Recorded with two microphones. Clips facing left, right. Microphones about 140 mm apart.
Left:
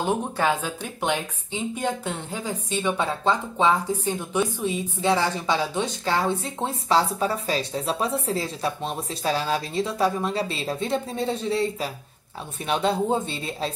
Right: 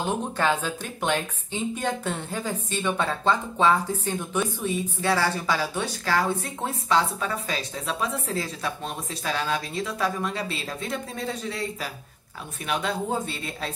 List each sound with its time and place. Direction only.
0.0 s speech: 10° left (ahead or behind); by 13.7 s 30° left (ahead or behind)